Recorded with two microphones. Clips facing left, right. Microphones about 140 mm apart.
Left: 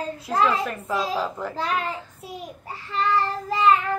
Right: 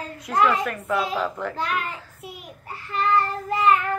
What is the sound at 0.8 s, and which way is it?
A woman's voice, 35° left (ahead or behind).